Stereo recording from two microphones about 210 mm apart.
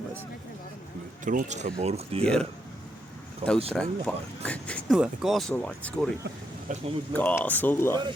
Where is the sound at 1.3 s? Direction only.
35° right (ahead or behind).